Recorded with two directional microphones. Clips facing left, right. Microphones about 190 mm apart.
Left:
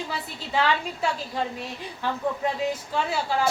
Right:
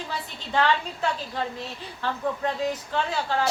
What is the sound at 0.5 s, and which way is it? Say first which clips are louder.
A woman's voice: right 1 dB; 5° left (ahead or behind).